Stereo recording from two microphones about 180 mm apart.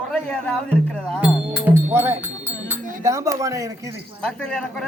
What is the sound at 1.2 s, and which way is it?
Speech, 10° right (ahead or behind).